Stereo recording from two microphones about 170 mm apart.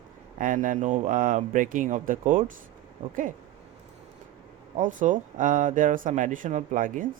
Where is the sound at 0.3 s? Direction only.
50° right (ahead or behind).